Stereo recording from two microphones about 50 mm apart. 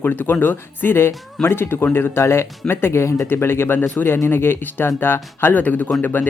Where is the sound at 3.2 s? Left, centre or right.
Left.